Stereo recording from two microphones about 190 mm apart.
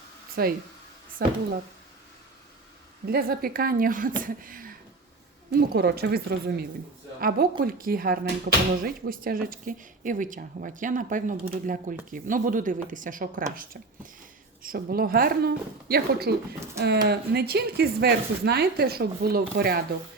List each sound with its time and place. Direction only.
0.4 s speech: 50° right (ahead or behind)
3.1 s speech: 50° right (ahead or behind)
5.5 s speech: 55° right (ahead or behind)